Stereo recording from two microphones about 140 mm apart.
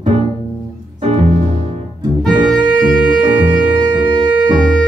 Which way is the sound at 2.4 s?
Centre (ahead or behind).